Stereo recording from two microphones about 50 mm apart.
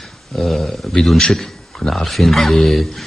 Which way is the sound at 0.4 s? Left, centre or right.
Centre.